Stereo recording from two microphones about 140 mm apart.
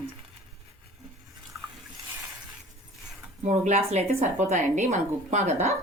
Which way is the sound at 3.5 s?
55° right (ahead or behind).